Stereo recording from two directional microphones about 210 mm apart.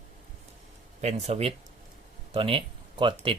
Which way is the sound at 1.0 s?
30° right (ahead or behind).